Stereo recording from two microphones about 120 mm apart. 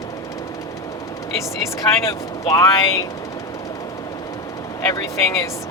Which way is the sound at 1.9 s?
25° left (ahead or behind).